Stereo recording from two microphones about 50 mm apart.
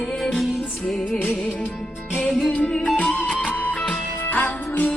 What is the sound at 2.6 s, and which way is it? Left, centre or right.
Music, centre.